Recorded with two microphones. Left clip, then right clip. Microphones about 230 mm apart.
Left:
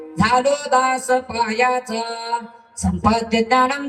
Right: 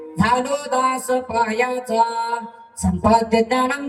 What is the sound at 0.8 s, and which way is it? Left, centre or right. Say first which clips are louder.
Speech: left 2 dB; centre.